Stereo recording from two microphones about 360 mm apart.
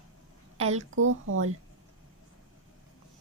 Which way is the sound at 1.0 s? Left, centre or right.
Right.